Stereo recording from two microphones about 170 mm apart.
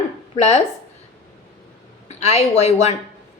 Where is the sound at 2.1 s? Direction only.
40° left (ahead or behind).